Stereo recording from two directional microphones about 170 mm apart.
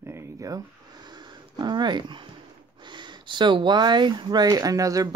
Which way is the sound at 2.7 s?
25° right (ahead or behind).